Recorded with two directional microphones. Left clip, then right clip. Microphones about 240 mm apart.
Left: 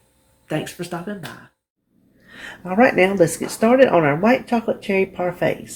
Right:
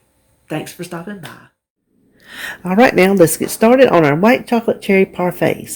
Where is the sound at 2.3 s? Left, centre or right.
Right.